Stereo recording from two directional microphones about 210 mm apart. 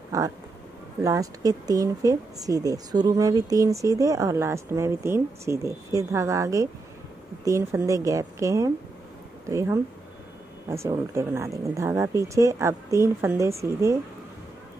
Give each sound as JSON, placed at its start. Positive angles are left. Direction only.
{"t": 0.1, "sound": "speech", "side_deg": -15}